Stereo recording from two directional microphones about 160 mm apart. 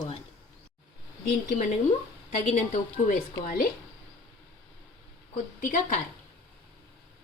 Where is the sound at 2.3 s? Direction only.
45° left (ahead or behind).